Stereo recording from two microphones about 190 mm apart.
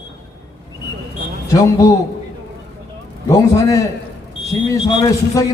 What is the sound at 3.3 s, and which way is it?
Speech, 15° left (ahead or behind).